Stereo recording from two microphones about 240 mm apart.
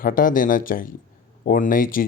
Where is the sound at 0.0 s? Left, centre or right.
Left.